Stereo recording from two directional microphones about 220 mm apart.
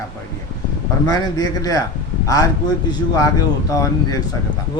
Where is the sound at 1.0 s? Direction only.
20° left (ahead or behind).